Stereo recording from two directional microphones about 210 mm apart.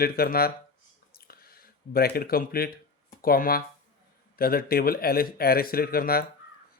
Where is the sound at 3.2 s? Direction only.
45° left (ahead or behind).